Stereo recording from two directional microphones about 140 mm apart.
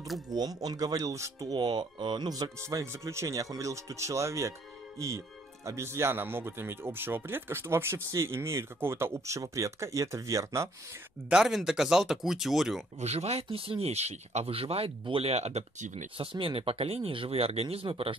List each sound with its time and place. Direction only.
0.3 s a man's voice: 25° right (ahead or behind)
11.2 s speech: 5° right (ahead or behind)
13.0 s speech: 50° right (ahead or behind)
16.2 s speech: 40° right (ahead or behind)